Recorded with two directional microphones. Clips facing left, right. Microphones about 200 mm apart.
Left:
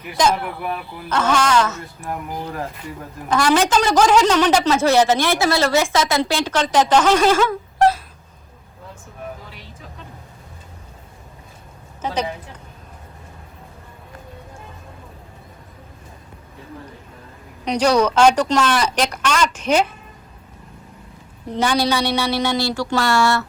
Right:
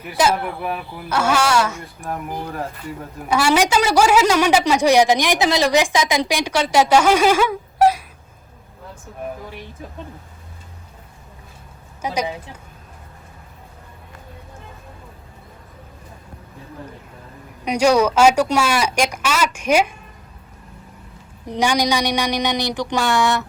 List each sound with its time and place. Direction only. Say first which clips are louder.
0.1 s a woman's voice: even; 5° right (ahead or behind)
2.0 s a woman's voice: right 1 dB; centre (ahead or behind)
12.0 s a woman's voice: even; 10° right (ahead or behind)
17.7 s a woman's voice: right 1 dB; 10° right (ahead or behind)
21.4 s a woman's voice: even; 15° right (ahead or behind)